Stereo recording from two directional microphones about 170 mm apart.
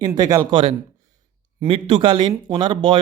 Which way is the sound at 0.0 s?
20° right (ahead or behind).